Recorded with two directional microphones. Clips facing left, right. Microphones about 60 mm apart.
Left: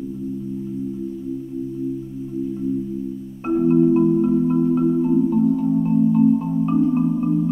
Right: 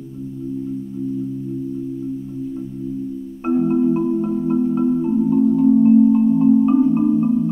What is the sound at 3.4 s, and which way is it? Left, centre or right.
Marimba, centre.